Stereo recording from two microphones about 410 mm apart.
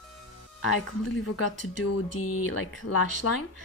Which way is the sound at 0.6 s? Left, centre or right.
Left.